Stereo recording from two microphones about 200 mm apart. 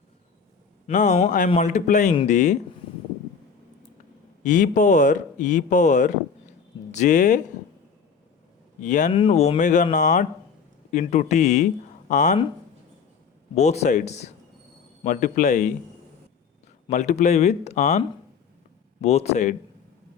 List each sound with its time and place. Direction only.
0.9 s speech: 35° left (ahead or behind)
4.4 s speech: 40° left (ahead or behind)
8.8 s speech: 40° left (ahead or behind)
13.6 s speech: 35° left (ahead or behind)
16.9 s speech: 35° left (ahead or behind)
19.0 s speech: 35° left (ahead or behind)